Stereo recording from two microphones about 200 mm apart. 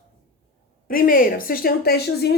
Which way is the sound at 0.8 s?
45° left (ahead or behind).